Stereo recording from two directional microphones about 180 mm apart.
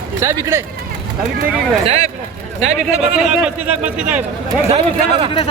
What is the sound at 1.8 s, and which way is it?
Speech, 35° right (ahead or behind).